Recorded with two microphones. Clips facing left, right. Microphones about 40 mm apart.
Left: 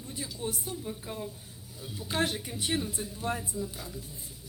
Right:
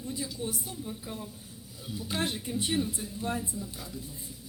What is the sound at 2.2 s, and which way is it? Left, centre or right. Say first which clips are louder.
Speech: even; left.